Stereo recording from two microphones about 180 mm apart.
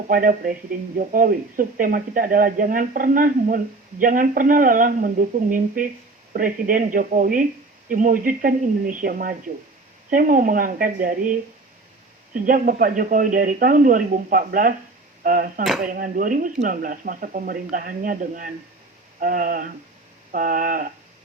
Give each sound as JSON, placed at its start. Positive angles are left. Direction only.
{"t": 0.1, "sound": "speech", "side_deg": -50}